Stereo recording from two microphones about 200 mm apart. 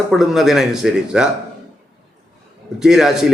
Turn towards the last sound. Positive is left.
turn(degrees=0)  # may be behind; listen again after turning